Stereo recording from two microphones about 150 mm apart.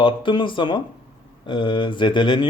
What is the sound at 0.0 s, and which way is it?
Speech, 35° left (ahead or behind).